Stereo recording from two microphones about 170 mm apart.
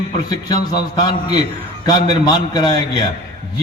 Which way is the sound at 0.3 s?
25° left (ahead or behind).